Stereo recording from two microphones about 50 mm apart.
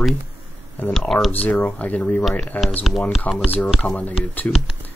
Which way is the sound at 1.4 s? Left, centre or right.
Left.